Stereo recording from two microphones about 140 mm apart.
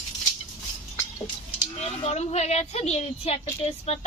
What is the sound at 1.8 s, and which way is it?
A woman's voice, 50° left (ahead or behind).